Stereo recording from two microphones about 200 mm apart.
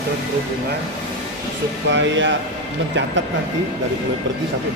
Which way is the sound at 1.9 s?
65° right (ahead or behind).